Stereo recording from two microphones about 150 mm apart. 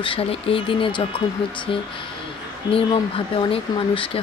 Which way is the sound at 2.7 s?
40° left (ahead or behind).